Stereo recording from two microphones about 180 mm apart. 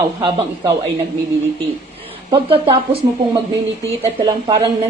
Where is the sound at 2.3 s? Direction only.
30° right (ahead or behind).